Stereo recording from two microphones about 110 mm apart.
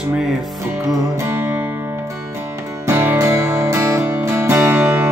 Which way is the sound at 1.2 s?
20° right (ahead or behind).